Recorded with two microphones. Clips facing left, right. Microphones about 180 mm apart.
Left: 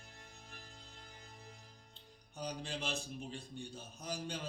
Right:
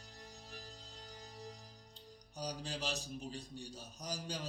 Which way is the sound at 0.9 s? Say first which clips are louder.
Right 4 dB; 35° right (ahead or behind).